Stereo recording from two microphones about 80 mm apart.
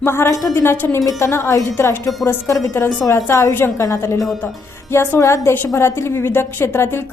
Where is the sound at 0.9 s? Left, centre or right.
Left.